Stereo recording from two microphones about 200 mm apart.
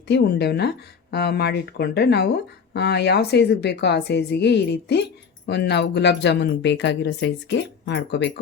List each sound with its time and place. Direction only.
0.1 s speech: 55° left (ahead or behind)